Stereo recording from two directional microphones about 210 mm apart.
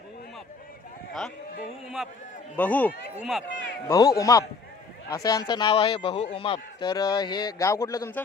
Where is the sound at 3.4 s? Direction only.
60° left (ahead or behind).